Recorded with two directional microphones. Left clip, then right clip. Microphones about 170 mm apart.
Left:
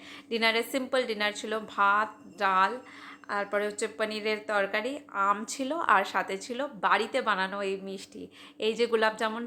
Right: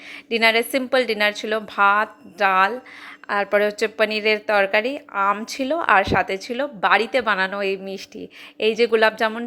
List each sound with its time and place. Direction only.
0.3 s a woman's voice: 30° right (ahead or behind)